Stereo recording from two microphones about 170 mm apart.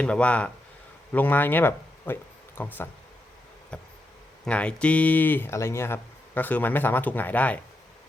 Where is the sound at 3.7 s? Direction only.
5° left (ahead or behind).